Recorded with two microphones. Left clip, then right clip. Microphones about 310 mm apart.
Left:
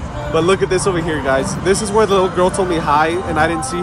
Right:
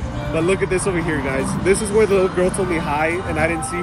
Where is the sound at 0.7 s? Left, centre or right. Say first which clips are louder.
Left 3 dB; left.